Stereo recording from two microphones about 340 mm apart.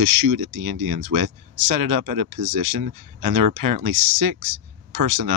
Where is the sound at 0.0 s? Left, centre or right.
Right.